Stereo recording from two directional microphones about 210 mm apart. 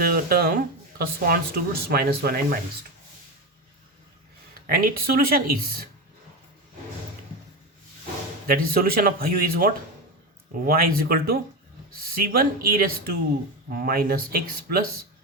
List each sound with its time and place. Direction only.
0.0 s speech: 45° right (ahead or behind)
4.5 s speech: 45° right (ahead or behind)
8.4 s speech: 45° right (ahead or behind)